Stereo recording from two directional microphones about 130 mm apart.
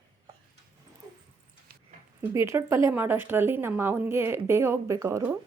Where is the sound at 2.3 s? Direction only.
20° right (ahead or behind).